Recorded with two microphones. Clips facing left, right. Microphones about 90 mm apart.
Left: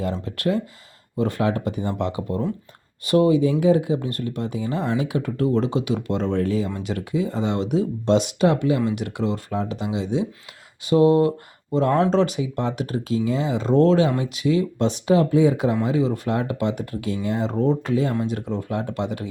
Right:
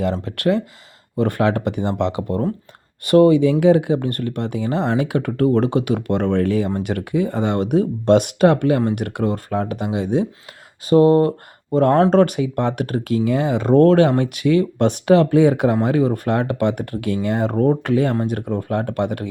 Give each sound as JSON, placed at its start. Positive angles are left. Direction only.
{"t": 0.0, "sound": "speech", "side_deg": -70}
{"t": 1.1, "sound": "speech", "side_deg": -60}